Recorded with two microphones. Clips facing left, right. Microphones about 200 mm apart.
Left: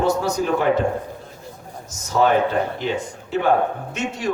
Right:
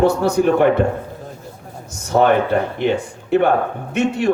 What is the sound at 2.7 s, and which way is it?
A man's voice, 60° right (ahead or behind).